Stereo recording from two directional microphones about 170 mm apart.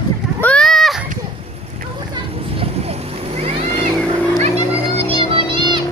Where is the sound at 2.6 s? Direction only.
35° right (ahead or behind).